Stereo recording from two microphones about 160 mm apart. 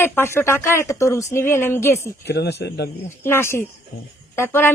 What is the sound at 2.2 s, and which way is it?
Speech, 90° left.